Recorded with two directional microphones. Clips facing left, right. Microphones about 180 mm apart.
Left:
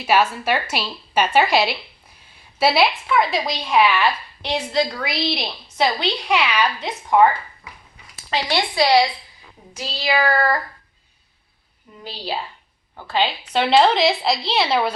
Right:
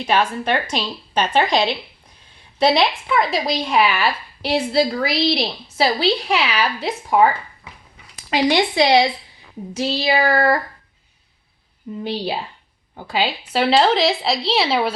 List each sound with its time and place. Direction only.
0.0 s a woman's voice: 5° left (ahead or behind)
8.3 s child singing: 15° right (ahead or behind)
12.0 s child singing: 20° right (ahead or behind)
13.0 s speech: 10° right (ahead or behind)